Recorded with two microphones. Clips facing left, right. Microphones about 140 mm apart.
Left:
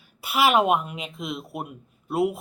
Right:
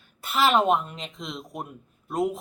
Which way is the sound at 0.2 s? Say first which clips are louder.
Left 1 dB; 10° left (ahead or behind).